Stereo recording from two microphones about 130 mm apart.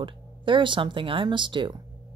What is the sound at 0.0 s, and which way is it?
Speech, 40° right (ahead or behind).